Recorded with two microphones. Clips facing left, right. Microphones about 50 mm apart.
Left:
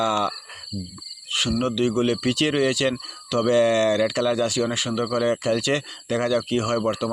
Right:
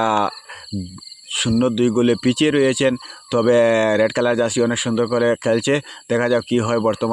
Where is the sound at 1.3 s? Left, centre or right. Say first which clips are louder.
Right 5 dB; centre.